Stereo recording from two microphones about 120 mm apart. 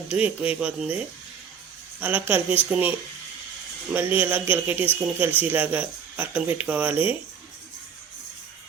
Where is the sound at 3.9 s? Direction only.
15° right (ahead or behind).